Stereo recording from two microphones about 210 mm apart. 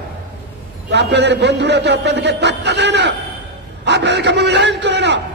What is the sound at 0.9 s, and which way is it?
A man's voice, 55° right (ahead or behind).